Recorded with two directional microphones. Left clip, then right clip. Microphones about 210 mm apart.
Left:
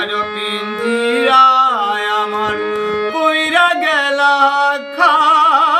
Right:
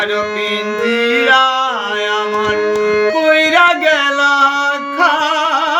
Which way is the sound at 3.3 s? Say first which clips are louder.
Right 3 dB; 15° left (ahead or behind).